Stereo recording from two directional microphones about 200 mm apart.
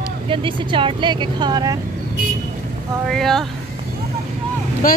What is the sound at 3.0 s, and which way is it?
Speech, centre (ahead or behind).